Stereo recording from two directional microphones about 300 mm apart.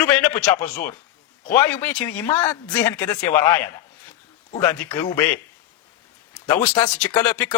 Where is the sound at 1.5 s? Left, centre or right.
Centre.